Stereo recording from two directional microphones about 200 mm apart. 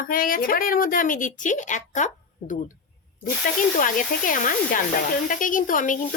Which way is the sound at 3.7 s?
40° left (ahead or behind).